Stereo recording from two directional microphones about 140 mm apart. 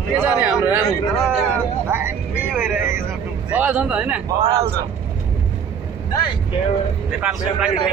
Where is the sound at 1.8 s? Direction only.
15° right (ahead or behind).